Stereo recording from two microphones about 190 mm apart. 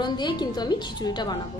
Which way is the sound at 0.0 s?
20° left (ahead or behind).